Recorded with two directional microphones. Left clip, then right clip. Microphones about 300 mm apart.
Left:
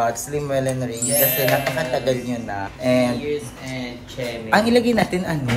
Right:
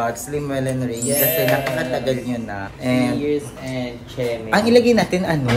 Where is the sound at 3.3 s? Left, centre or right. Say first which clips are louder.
Right 3 dB; centre.